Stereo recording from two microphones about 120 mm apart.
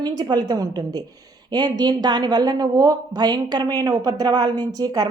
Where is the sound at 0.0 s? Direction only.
35° right (ahead or behind).